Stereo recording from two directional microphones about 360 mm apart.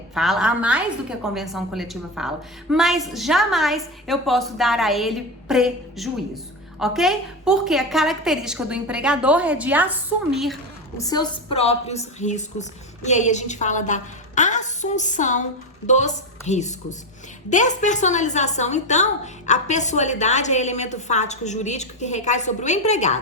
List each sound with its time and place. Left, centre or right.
0.1 s a woman's voice: centre